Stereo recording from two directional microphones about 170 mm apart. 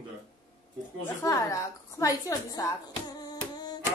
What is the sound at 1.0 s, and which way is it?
A woman's voice, 20° left (ahead or behind).